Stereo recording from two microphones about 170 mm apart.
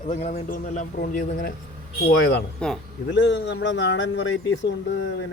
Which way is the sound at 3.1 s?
90° left.